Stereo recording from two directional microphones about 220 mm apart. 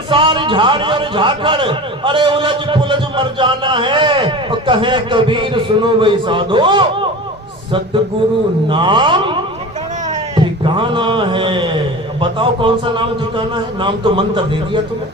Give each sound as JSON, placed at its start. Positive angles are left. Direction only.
{"t": 0.1, "sound": "a man's voice", "side_deg": -20}
{"t": 8.7, "sound": "a man's voice", "side_deg": -20}
{"t": 10.3, "sound": "a man's voice", "side_deg": -20}